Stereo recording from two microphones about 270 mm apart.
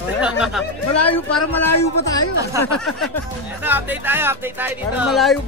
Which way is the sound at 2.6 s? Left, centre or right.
Centre.